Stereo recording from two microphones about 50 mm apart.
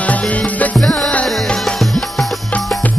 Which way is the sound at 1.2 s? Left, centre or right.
Centre.